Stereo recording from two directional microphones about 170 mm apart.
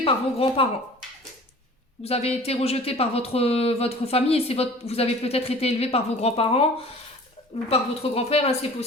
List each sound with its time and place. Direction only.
0.0 s speech: 35° left (ahead or behind)
2.0 s speech: 35° left (ahead or behind)